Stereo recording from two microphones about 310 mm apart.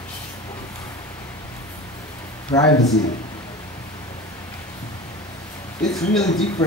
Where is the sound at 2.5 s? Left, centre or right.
Centre.